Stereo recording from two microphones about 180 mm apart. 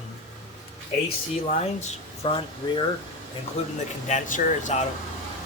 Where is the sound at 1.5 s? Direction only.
40° left (ahead or behind).